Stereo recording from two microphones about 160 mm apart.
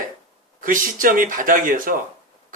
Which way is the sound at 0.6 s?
60° right (ahead or behind).